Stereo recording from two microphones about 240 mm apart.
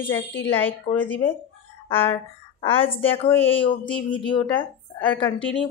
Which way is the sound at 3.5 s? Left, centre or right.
Left.